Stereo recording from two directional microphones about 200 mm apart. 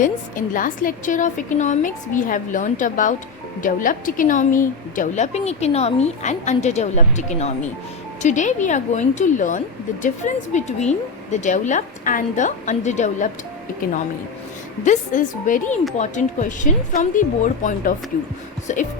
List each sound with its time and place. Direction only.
0.0 s a woman's voice: 40° left (ahead or behind)
14.8 s a woman's voice: 40° left (ahead or behind)